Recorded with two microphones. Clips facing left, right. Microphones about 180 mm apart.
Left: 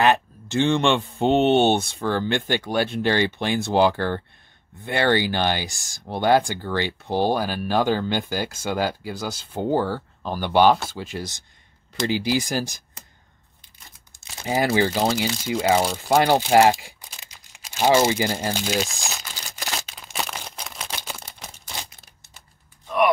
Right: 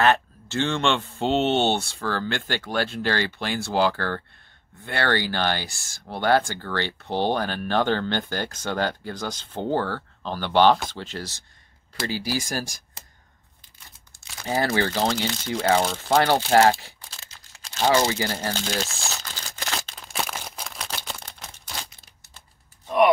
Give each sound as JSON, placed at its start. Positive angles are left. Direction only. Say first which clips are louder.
{"t": 0.0, "sound": "speech", "louder": "left 1 dB", "side_deg": 15}
{"t": 13.9, "sound": "speech", "louder": "left 1 dB", "side_deg": 15}
{"t": 20.0, "sound": "a sound", "louder": "even", "side_deg": 0}